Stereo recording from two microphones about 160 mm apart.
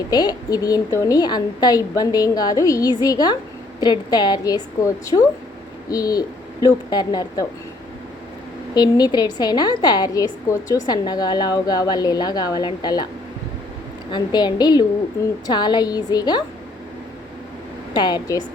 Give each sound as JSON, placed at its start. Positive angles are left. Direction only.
{"t": 0.1, "sound": "a woman's voice", "side_deg": 25}
{"t": 5.9, "sound": "a woman's voice", "side_deg": 25}
{"t": 8.7, "sound": "a woman's voice", "side_deg": 25}
{"t": 14.1, "sound": "a woman's voice", "side_deg": 25}
{"t": 17.9, "sound": "a woman's voice", "side_deg": 25}